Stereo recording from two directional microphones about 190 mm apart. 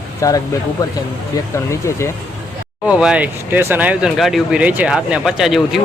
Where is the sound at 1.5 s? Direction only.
15° left (ahead or behind).